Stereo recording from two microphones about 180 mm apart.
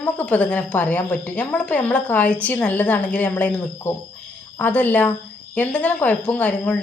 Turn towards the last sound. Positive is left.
turn(degrees=5)  # may be behind; listen again after turning